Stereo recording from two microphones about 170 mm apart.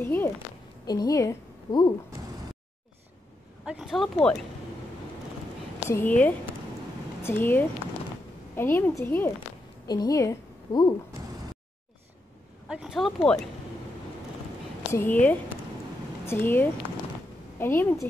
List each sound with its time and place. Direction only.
0.0 s a woman's voice: 15° left (ahead or behind)
3.6 s speech: 5° right (ahead or behind)
5.9 s a woman's voice: 10° left (ahead or behind)
12.6 s speech: 5° right (ahead or behind)
14.9 s a woman's voice: 10° left (ahead or behind)